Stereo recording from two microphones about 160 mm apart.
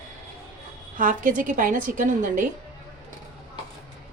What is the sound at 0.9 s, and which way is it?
A woman's voice, 55° right (ahead or behind).